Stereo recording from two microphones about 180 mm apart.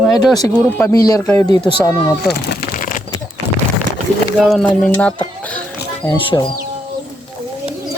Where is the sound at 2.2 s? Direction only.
65° left (ahead or behind).